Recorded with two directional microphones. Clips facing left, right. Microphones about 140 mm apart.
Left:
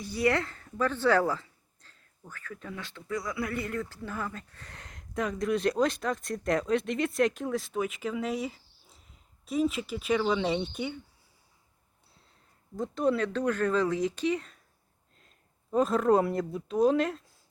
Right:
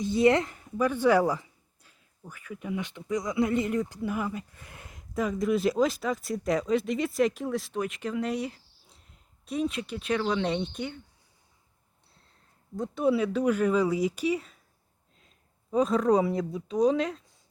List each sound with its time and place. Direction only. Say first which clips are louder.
0.0 s a woman's voice: right 5 dB; 20° right (ahead or behind); by 11.0 s 5° left (ahead or behind)
12.1 s speech: even; centre (ahead or behind)